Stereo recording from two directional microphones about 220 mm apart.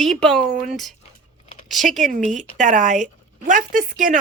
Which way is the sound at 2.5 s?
35° right (ahead or behind).